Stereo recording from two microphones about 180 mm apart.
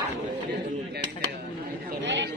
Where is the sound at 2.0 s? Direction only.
80° right.